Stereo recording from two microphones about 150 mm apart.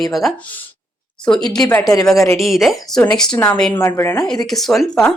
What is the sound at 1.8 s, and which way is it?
Speech, 25° left (ahead or behind).